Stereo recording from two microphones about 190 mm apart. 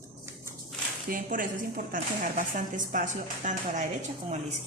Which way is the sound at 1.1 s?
45° right (ahead or behind).